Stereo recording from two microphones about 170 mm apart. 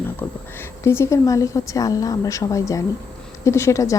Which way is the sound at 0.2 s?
15° left (ahead or behind).